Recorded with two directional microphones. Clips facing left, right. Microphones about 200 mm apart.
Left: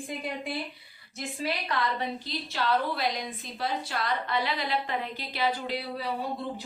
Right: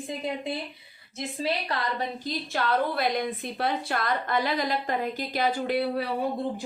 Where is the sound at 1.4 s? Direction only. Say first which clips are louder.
Right 1 dB; 35° right (ahead or behind); by 6.1 s 60° right (ahead or behind).